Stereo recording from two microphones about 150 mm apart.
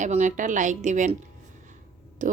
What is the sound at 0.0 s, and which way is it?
A woman's voice, 55° right (ahead or behind).